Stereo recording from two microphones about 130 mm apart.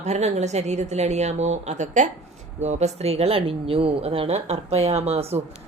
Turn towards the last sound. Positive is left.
turn(degrees=-50)  # may be behind; listen again after turning